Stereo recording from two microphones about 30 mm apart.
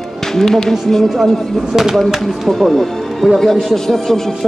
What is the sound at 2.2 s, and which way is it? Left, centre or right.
Speech, centre.